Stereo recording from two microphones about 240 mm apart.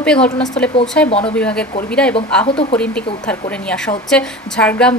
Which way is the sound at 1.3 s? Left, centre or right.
Centre.